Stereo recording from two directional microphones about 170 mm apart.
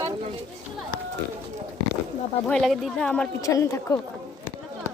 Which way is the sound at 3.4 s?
20° left (ahead or behind).